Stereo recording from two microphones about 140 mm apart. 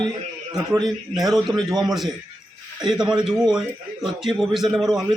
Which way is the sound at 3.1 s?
5° right (ahead or behind).